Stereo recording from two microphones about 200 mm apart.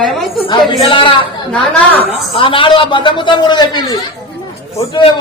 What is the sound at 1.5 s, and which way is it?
Speech, 5° left (ahead or behind).